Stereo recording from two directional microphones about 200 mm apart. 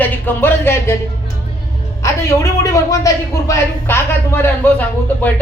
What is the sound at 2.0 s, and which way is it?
A woman's voice, 15° left (ahead or behind).